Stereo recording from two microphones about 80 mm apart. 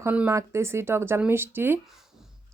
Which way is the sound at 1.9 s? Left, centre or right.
Centre.